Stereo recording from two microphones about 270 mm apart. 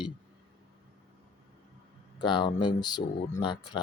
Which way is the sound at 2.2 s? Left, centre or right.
Centre.